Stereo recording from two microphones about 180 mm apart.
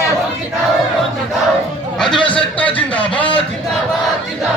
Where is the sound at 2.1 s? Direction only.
25° left (ahead or behind).